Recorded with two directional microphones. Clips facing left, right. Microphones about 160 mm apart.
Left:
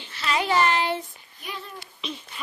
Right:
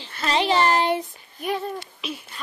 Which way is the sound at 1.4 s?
60° right (ahead or behind).